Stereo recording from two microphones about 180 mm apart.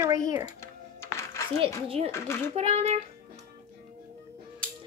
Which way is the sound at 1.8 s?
35° right (ahead or behind).